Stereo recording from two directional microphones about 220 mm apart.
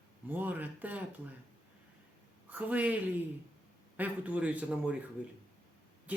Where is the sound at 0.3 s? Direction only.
10° right (ahead or behind).